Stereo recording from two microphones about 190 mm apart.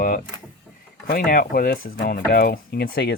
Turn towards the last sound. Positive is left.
turn(degrees=55)  # may be behind; listen again after turning